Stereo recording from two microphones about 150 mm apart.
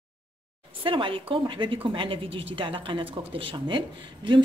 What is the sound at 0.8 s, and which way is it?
Speech, 35° right (ahead or behind).